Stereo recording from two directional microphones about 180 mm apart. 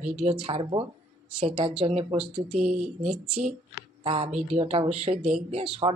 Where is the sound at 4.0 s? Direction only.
30° right (ahead or behind).